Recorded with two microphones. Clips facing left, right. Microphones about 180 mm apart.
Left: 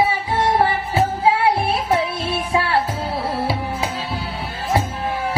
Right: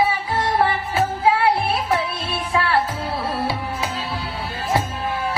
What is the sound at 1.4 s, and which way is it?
Music, 25° left (ahead or behind).